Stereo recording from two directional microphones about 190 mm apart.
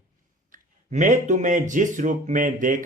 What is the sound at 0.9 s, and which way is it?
Speech, 40° right (ahead or behind).